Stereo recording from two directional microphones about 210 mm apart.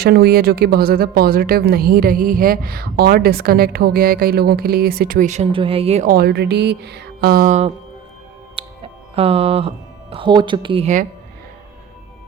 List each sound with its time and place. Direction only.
0.0 s speech: 50° right (ahead or behind); by 6.1 s 30° right (ahead or behind)
6.1 s speech: 50° right (ahead or behind); by 11.0 s 30° right (ahead or behind)